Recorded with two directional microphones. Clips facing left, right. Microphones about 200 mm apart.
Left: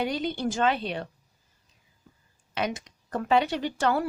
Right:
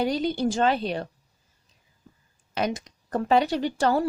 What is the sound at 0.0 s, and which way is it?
Speech, 35° right (ahead or behind).